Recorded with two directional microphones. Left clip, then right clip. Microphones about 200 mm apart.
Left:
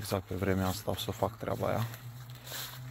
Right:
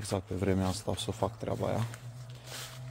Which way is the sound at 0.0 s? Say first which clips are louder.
Even; 15° right (ahead or behind).